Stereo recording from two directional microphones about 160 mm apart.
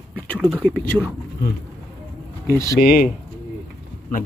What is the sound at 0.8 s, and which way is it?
Speech, 15° left (ahead or behind).